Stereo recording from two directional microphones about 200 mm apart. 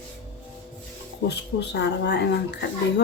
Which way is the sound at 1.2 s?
55° left (ahead or behind).